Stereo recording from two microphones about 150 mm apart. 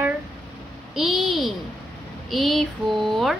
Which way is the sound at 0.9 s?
Centre (ahead or behind).